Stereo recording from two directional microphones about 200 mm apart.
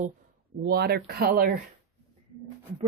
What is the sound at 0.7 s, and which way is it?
Speech, 50° right (ahead or behind).